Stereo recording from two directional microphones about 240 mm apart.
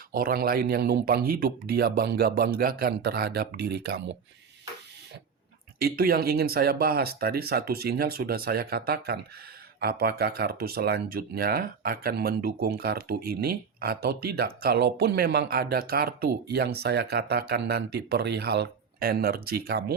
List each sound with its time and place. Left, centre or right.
0.1 s speech: right
5.8 s speech: right